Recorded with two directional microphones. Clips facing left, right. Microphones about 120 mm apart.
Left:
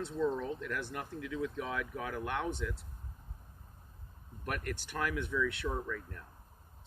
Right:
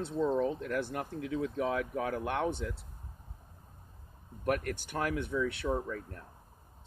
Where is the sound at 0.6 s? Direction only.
45° right (ahead or behind).